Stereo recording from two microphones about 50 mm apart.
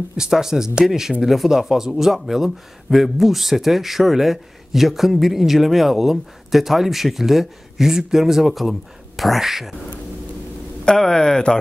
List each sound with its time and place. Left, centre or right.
0.2 s a man's voice: centre
10.9 s speech: centre